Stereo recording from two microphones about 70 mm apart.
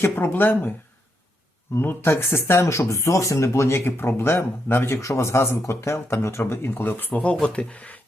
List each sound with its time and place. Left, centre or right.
0.0 s speech: left
1.7 s speech: left
7.1 s speech: centre